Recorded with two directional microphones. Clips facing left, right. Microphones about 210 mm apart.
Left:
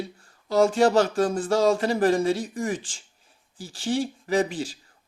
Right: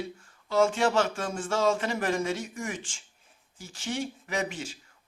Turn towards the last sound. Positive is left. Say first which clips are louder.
# left 8 dB
turn(degrees=35)  # may be behind; listen again after turning